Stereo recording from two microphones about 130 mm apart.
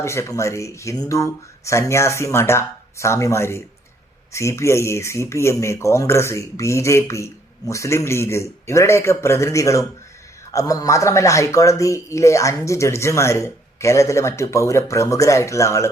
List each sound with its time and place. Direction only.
0.0 s speech: 20° left (ahead or behind)